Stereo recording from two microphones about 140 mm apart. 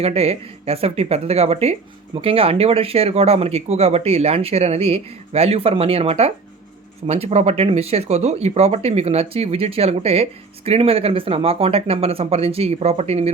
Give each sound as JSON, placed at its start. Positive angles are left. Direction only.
{"t": 0.0, "sound": "speech", "side_deg": -45}